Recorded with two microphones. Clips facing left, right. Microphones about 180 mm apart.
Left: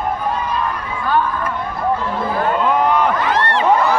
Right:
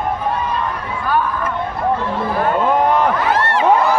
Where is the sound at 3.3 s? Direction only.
10° right (ahead or behind).